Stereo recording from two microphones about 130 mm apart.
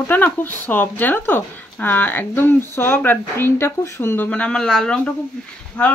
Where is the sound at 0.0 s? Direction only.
15° left (ahead or behind).